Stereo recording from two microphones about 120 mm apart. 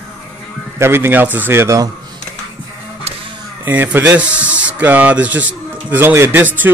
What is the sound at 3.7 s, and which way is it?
A man's voice, 15° right (ahead or behind).